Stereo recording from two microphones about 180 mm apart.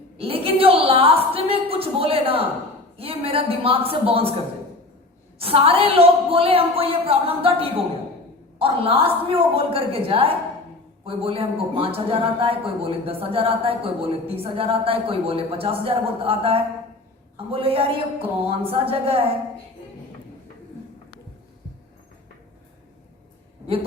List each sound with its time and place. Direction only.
0.2 s a woman's voice: 30° right (ahead or behind)
5.4 s a man's voice: 30° right (ahead or behind)